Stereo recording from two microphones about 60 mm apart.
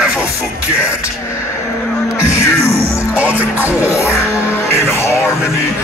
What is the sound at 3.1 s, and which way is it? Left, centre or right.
Music, right.